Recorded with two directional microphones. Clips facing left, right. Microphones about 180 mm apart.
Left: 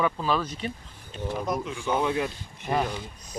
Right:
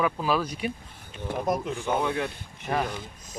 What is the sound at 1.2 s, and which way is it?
Speech, 50° right (ahead or behind).